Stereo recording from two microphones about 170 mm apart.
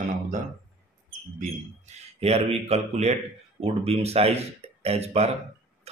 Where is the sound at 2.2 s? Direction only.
35° right (ahead or behind).